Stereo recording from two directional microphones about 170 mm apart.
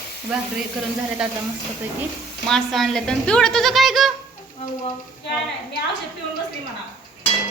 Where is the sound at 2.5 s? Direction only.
Centre (ahead or behind).